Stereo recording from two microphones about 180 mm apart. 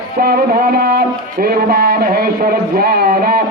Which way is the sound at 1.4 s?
60° right (ahead or behind).